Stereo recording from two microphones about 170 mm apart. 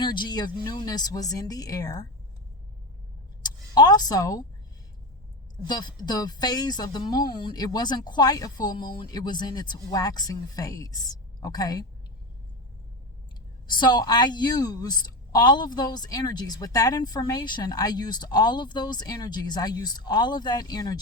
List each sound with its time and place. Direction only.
0.0 s a woman's voice: 25° left (ahead or behind)
3.4 s a sound: 25° left (ahead or behind)
5.6 s a woman's voice: 25° left (ahead or behind)
13.7 s a woman's voice: 25° left (ahead or behind)